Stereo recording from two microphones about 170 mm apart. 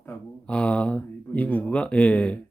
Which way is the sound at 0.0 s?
5° left (ahead or behind).